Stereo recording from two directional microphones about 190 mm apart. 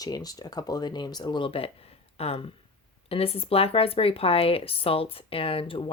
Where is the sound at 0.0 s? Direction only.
20° left (ahead or behind).